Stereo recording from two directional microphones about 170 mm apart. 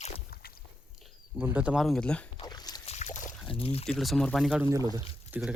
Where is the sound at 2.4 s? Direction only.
25° left (ahead or behind).